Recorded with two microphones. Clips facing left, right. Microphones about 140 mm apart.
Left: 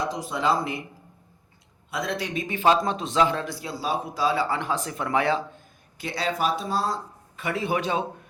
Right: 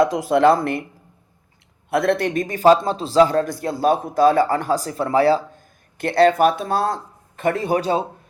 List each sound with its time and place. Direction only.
0.0 s speech: 70° right (ahead or behind)
1.9 s a man's voice: 60° right (ahead or behind); by 2.7 s 40° right (ahead or behind)
2.7 s speech: 30° right (ahead or behind)
6.0 s speech: 55° right (ahead or behind); by 8.0 s 40° right (ahead or behind)